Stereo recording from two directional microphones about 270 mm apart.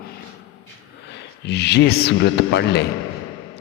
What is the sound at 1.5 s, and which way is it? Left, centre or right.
Speech, left.